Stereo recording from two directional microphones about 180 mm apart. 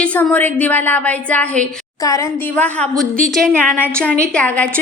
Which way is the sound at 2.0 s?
20° left (ahead or behind).